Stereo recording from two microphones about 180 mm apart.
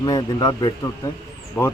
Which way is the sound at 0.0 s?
20° left (ahead or behind).